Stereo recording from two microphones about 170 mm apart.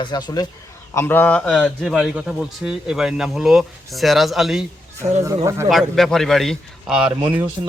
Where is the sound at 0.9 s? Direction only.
10° left (ahead or behind).